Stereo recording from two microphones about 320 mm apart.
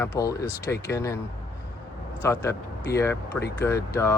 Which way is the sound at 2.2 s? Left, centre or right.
Centre.